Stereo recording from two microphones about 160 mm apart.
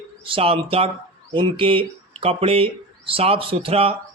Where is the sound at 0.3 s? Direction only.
35° right (ahead or behind).